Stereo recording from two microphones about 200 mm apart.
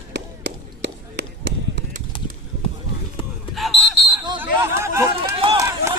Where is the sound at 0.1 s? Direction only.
60° right (ahead or behind).